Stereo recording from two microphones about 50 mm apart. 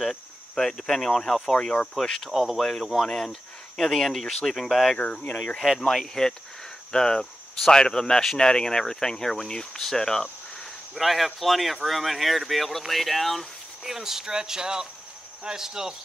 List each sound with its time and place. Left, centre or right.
0.0 s speech: centre
2.3 s speech: centre
2.6 s speech: centre
4.9 s speech: left
5.6 s speech: centre